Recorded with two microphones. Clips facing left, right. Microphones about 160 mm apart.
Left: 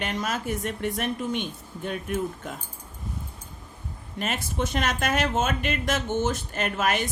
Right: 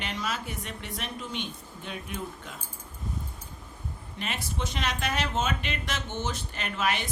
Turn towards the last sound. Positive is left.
turn(degrees=45)  # may be behind; listen again after turning